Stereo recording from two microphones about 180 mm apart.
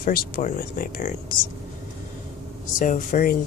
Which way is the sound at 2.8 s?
45° left (ahead or behind).